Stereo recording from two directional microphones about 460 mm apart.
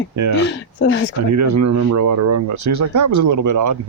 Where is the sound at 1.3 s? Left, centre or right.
Right.